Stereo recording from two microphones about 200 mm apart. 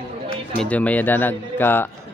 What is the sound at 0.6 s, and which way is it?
A man's voice, 5° left (ahead or behind).